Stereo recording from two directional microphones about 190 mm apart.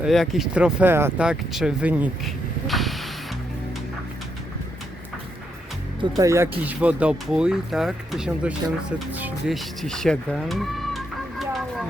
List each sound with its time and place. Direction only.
0.0 s speech: centre (ahead or behind)
6.0 s speech: 20° right (ahead or behind); by 11.9 s centre (ahead or behind)